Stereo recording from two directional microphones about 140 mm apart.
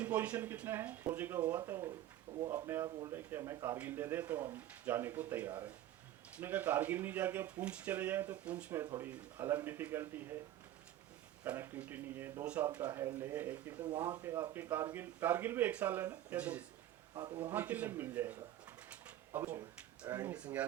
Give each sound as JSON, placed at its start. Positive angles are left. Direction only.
{"t": 0.0, "sound": "a man's voice", "side_deg": -10}
{"t": 11.4, "sound": "a man's voice", "side_deg": -15}
{"t": 17.2, "sound": "speech", "side_deg": -30}
{"t": 17.5, "sound": "a man's voice", "side_deg": -10}
{"t": 18.9, "sound": "a sound", "side_deg": -10}
{"t": 20.1, "sound": "a man's voice", "side_deg": -20}